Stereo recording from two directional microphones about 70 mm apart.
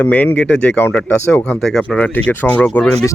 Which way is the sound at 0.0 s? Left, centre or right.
Left.